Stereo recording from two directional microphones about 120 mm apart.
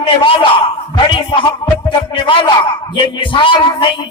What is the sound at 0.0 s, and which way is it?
A man's voice, 50° left (ahead or behind).